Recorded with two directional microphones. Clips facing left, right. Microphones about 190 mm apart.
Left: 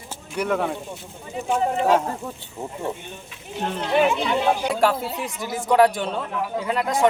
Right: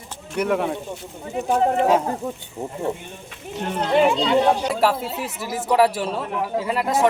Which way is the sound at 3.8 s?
35° right (ahead or behind).